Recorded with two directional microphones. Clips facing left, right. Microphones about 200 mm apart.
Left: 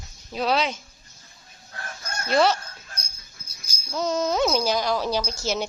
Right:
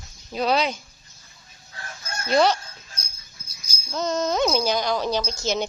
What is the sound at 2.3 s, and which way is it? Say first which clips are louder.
Speech: right 1 dB; centre (ahead or behind).